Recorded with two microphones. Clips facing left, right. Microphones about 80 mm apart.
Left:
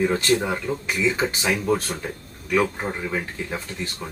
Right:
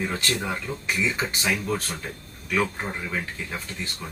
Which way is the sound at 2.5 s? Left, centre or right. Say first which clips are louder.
Left 4 dB; centre.